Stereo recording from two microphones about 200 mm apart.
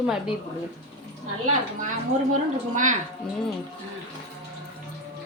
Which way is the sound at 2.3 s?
40° right (ahead or behind).